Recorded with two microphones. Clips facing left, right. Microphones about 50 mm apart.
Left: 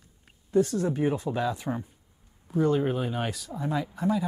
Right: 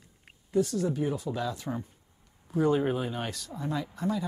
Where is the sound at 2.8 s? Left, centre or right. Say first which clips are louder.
Left 2 dB; centre.